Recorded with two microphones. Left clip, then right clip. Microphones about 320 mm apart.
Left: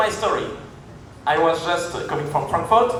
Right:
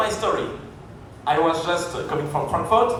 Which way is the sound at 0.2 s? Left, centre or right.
Left.